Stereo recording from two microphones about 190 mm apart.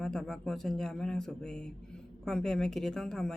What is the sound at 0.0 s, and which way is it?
A woman's voice, 5° left (ahead or behind).